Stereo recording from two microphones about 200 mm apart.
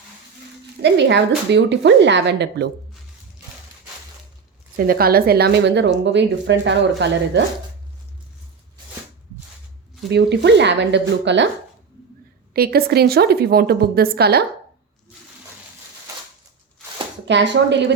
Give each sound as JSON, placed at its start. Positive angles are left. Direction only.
{"t": 0.8, "sound": "a woman's voice", "side_deg": -60}
{"t": 4.8, "sound": "a woman's voice", "side_deg": -45}
{"t": 10.1, "sound": "a woman's voice", "side_deg": -55}
{"t": 12.5, "sound": "a woman's voice", "side_deg": -50}
{"t": 17.2, "sound": "a woman's voice", "side_deg": -65}